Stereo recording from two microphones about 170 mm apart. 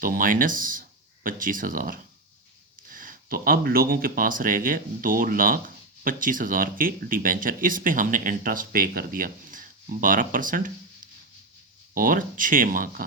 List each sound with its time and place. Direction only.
0.0 s speech: 55° right (ahead or behind)